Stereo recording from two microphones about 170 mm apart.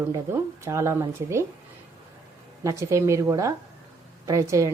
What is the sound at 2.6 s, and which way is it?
A woman's voice, 20° right (ahead or behind).